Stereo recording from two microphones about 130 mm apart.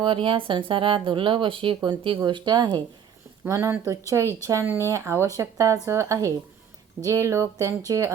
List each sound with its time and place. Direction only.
0.0 s speech: 40° right (ahead or behind)
3.4 s speech: 20° right (ahead or behind)